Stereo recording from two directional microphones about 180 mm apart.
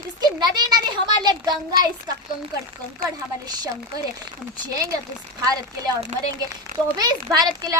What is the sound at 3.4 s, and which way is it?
Speech, 20° right (ahead or behind).